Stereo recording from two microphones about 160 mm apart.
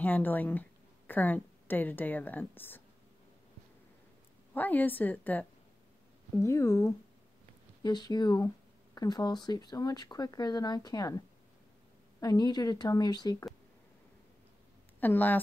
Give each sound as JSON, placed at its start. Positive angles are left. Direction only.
{"t": 0.0, "sound": "a woman's voice", "side_deg": 10}
{"t": 4.6, "sound": "a woman's voice", "side_deg": 10}
{"t": 7.8, "sound": "speech", "side_deg": 25}
{"t": 15.0, "sound": "a woman's voice", "side_deg": 10}